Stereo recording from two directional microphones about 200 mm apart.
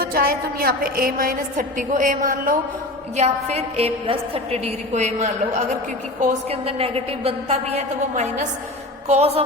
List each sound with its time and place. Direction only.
0.0 s a woman's voice: 50° right (ahead or behind); by 9.4 s 30° right (ahead or behind)